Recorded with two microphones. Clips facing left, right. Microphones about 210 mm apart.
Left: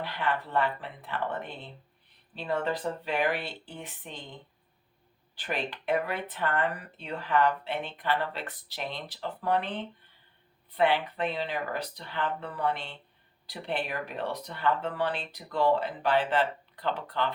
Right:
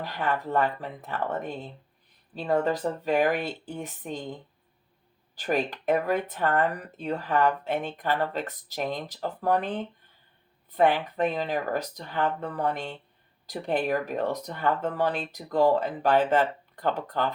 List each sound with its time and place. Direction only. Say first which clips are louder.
0.0 s speech: right 2 dB; 45° right (ahead or behind)